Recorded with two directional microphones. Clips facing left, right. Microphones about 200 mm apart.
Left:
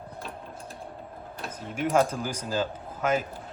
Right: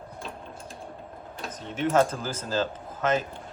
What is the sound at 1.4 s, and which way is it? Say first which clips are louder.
Speech: right 1 dB; 5° left (ahead or behind).